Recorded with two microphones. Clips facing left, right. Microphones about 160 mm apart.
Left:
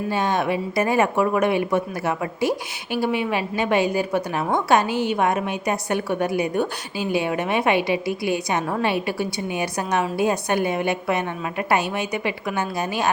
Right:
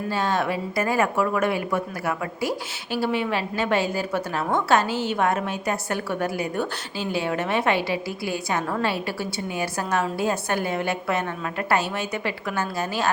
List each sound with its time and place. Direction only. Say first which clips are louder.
0.1 s speech: left 2 dB; 15° left (ahead or behind)